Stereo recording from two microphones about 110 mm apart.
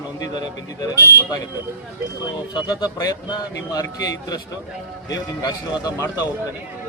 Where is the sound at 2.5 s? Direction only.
35° left (ahead or behind).